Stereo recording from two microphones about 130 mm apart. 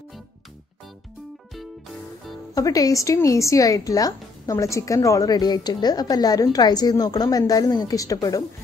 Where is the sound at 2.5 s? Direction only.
25° left (ahead or behind).